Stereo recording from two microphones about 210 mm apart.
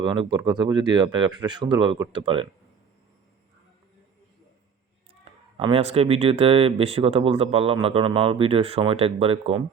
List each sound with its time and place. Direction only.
0.0 s speech: 20° right (ahead or behind)
5.5 s speech: 25° right (ahead or behind)